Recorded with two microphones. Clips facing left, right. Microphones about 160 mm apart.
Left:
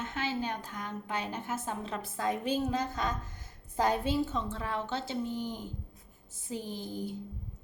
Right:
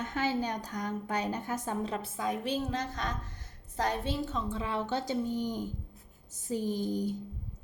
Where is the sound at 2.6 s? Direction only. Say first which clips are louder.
Left 3 dB; 10° left (ahead or behind).